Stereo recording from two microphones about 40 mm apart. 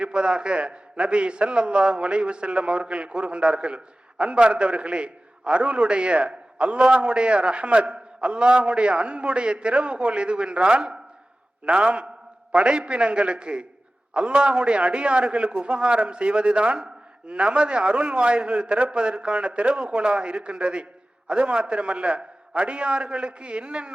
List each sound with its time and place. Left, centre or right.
0.0 s a man's voice: right